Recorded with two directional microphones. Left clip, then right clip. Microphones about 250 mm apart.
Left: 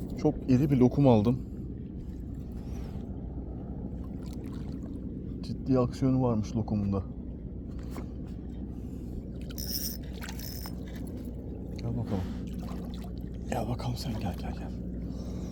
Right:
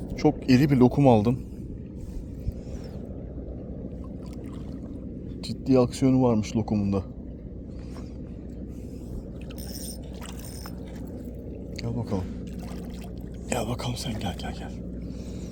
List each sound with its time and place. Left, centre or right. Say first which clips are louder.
0.2 s a man's voice: right 6 dB; right; by 1.4 s centre
5.5 s speech: right 6 dB; right
11.8 s a sound: right 5 dB; right
13.5 s a man's voice: right 5 dB; centre